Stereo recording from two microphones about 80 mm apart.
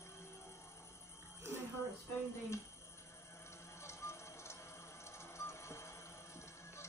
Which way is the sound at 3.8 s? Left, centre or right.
Left.